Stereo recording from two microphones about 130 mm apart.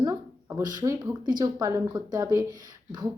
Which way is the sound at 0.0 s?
20° right (ahead or behind).